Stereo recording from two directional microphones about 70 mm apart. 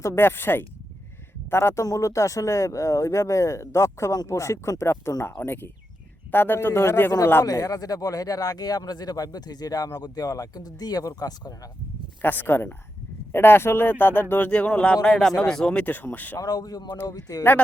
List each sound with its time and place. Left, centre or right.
0.1 s a man's voice: left
7.4 s speech: left
12.2 s a man's voice: left
16.4 s speech: left